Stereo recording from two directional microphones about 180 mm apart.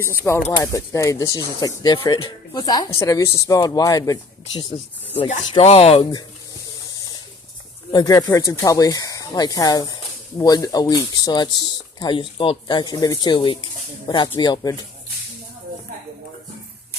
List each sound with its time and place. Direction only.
0.0 s speech: 15° left (ahead or behind)
5.1 s speech: 35° left (ahead or behind)
7.9 s speech: 20° left (ahead or behind)